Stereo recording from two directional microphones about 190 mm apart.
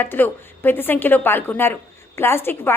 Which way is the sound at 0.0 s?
10° left (ahead or behind).